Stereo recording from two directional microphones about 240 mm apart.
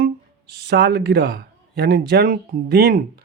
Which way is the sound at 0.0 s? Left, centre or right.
Right.